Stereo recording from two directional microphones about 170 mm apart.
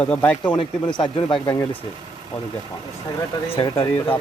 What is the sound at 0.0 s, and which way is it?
Speech, 5° left (ahead or behind).